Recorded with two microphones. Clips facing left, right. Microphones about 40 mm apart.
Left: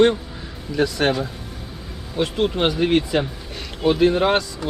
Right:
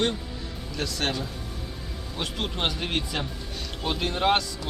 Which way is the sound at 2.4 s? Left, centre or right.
Centre.